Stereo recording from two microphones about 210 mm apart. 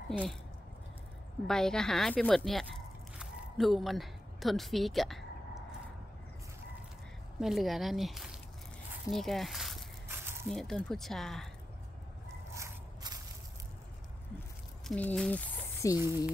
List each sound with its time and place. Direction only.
0.1 s speech: centre (ahead or behind)
1.5 s speech: 5° left (ahead or behind)
7.3 s speech: centre (ahead or behind)
10.0 s a sound: 10° right (ahead or behind)
10.5 s speech: centre (ahead or behind)
12.5 s a sound: 15° right (ahead or behind)
14.9 s speech: 5° left (ahead or behind)